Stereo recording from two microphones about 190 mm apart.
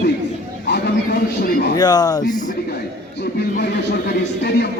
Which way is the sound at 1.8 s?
20° left (ahead or behind).